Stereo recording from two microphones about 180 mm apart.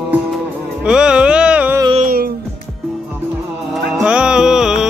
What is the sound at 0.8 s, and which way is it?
Music, 5° right (ahead or behind).